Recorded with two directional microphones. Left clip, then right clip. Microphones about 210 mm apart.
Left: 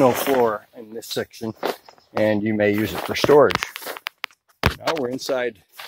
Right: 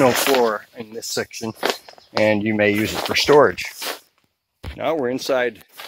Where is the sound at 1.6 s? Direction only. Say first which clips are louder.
Right 5 dB; 5° right (ahead or behind).